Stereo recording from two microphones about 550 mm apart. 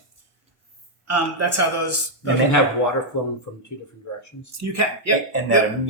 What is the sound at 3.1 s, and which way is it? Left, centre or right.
Speech, left.